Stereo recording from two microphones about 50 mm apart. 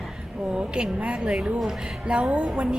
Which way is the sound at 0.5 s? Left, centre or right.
Centre.